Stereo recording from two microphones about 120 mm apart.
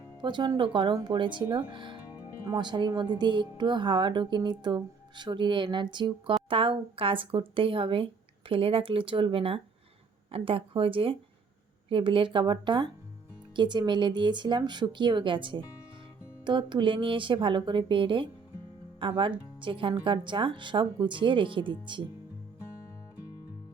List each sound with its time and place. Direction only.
0.2 s speech: 40° right (ahead or behind)